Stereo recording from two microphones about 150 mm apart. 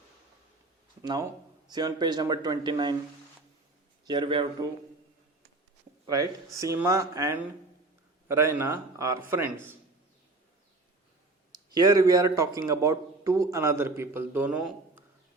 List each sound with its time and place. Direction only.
1.0 s a man's voice: 30° right (ahead or behind)
4.0 s speech: 30° right (ahead or behind)
6.1 s a man's voice: 20° right (ahead or behind)
11.7 s a man's voice: 25° right (ahead or behind); by 15.0 s 10° right (ahead or behind)